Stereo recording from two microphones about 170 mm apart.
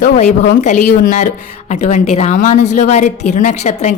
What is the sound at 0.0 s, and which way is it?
A woman's voice, 45° left (ahead or behind).